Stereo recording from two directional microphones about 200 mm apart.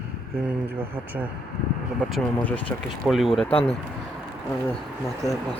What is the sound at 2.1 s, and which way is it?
Speech, 10° left (ahead or behind).